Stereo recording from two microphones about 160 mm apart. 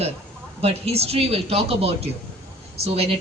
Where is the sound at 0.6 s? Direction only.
40° right (ahead or behind).